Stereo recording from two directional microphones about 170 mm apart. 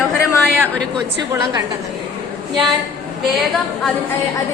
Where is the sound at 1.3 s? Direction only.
20° right (ahead or behind).